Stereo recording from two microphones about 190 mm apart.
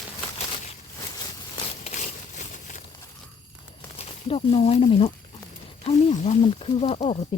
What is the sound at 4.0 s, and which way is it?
Speech, 30° left (ahead or behind).